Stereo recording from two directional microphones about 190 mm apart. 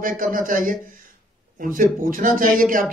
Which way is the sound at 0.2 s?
45° right (ahead or behind).